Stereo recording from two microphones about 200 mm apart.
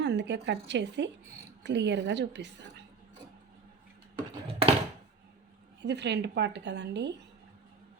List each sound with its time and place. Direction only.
0.0 s a woman's voice: 60° right (ahead or behind)
4.2 s a sound: 30° right (ahead or behind)
5.8 s a woman's voice: 60° right (ahead or behind)